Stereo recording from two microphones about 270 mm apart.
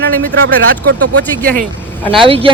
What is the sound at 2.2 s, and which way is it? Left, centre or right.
Speech, centre.